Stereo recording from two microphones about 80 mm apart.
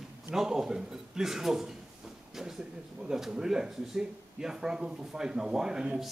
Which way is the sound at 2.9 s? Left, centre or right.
Centre.